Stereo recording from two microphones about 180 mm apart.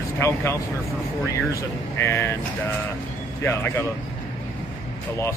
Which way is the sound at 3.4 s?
10° left (ahead or behind).